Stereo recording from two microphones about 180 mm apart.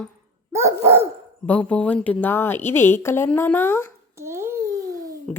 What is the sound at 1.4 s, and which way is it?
Speech, 5° left (ahead or behind).